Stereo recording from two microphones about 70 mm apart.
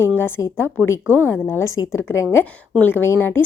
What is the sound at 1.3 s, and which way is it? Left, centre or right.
Speech, left.